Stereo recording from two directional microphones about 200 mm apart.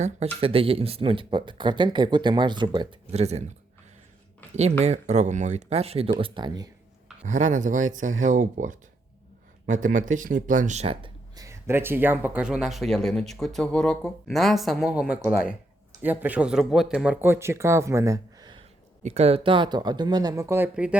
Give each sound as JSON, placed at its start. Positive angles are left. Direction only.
{"t": 0.3, "sound": "speech", "side_deg": -30}
{"t": 4.8, "sound": "speech", "side_deg": -35}
{"t": 7.3, "sound": "speech", "side_deg": -40}
{"t": 11.3, "sound": "speech", "side_deg": -15}
{"t": 19.0, "sound": "speech", "side_deg": -30}